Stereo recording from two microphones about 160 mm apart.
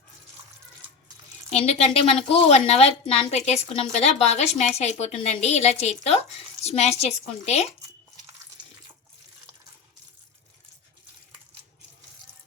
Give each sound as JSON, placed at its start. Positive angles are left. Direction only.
{"t": 1.6, "sound": "a woman's voice", "side_deg": 40}